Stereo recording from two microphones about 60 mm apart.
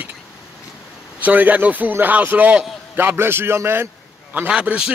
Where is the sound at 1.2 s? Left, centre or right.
Right.